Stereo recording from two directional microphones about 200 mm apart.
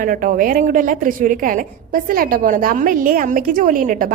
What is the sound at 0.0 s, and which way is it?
A woman's voice, 45° right (ahead or behind).